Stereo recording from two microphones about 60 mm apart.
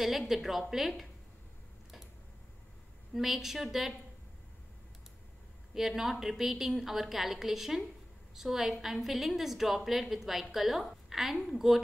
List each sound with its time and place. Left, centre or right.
0.0 s a woman's voice: centre
3.2 s a woman's voice: centre
5.8 s a woman's voice: centre